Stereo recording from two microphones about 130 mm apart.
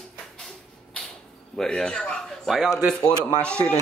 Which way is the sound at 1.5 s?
5° left (ahead or behind).